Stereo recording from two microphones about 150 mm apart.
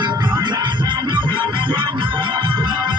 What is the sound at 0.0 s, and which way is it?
Music, 30° right (ahead or behind).